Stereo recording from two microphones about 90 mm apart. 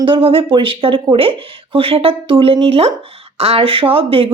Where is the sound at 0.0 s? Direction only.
80° right.